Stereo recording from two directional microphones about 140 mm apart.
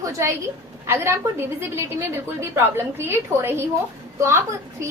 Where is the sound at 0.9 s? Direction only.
15° right (ahead or behind).